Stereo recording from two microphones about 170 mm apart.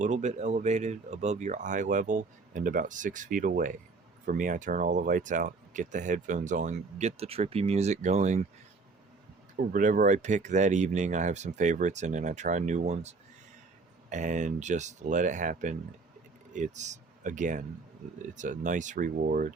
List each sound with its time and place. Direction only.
0.0 s speech: 45° right (ahead or behind)
9.6 s speech: 55° right (ahead or behind)